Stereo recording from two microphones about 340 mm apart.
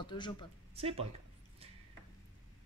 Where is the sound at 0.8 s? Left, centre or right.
Centre.